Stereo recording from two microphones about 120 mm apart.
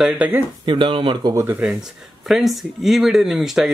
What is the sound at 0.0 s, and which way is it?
Speech, 5° right (ahead or behind).